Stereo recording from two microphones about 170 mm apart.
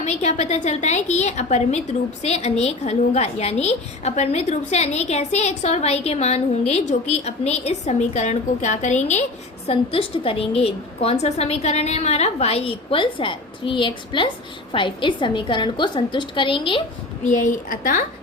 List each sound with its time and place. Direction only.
0.0 s a woman's voice: 40° left (ahead or behind)
9.6 s a woman's voice: 35° left (ahead or behind)
17.2 s a woman's voice: 50° left (ahead or behind)